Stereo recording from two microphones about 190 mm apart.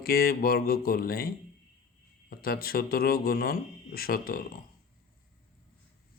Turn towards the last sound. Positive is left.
turn(degrees=50)  # may be behind; listen again after turning